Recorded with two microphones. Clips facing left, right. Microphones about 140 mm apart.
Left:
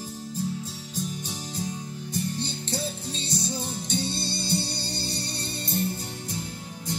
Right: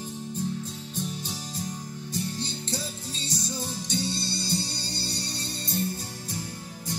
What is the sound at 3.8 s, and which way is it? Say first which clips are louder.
Music: left 1 dB; 55° left (ahead or behind).